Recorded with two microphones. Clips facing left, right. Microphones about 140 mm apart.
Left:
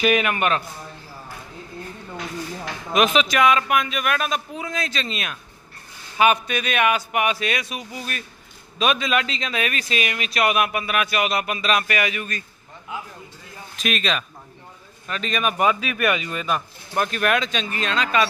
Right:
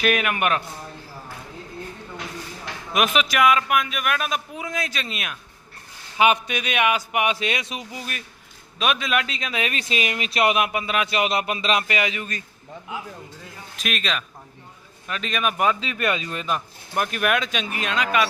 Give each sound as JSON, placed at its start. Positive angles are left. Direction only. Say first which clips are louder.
{"t": 0.0, "sound": "a man's voice", "louder": "left 2 dB", "side_deg": 0}
{"t": 2.9, "sound": "speech", "louder": "left 3 dB", "side_deg": -5}
{"t": 8.8, "sound": "a man's voice", "louder": "left 2 dB", "side_deg": 0}
{"t": 9.6, "sound": "speech", "louder": "even", "side_deg": -25}
{"t": 13.7, "sound": "a man's voice", "louder": "left 3 dB", "side_deg": 0}
{"t": 16.9, "sound": "speech", "louder": "left 1 dB", "side_deg": -10}